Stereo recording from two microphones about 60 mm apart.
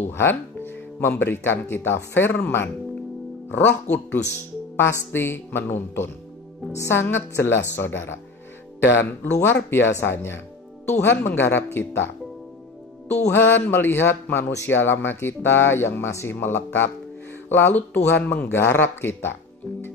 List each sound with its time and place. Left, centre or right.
0.2 s speech: left
6.7 s speech: left
13.3 s speech: left
18.5 s speech: left